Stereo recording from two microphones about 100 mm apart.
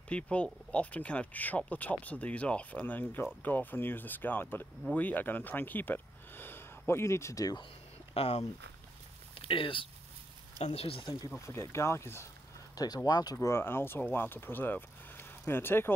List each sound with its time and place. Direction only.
0.1 s speech: 10° left (ahead or behind); by 7.6 s 35° left (ahead or behind)
8.1 s speech: 85° left
9.3 s speech: 60° left (ahead or behind)
10.6 s speech: 85° left; by 11.1 s 65° left (ahead or behind)
11.2 s speech: 25° left (ahead or behind)
12.7 s speech: 40° left (ahead or behind)
13.5 s speech: 25° left (ahead or behind)